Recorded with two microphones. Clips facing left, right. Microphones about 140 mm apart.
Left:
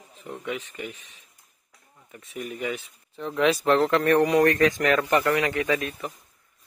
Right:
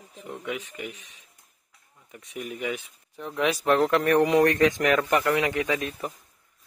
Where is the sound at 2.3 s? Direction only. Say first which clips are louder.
Left 1 dB; 15° right (ahead or behind).